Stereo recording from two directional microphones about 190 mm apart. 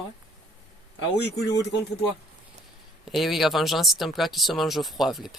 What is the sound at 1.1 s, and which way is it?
Speech, 60° left (ahead or behind).